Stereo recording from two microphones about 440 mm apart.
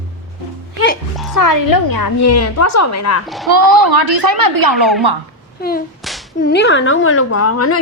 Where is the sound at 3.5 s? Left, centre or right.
Right.